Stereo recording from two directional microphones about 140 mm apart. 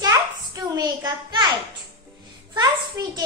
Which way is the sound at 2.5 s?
30° right (ahead or behind).